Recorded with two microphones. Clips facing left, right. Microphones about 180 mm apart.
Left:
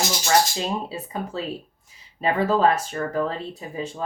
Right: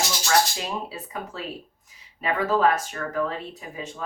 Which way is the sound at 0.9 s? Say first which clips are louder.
Left 5 dB; 30° left (ahead or behind).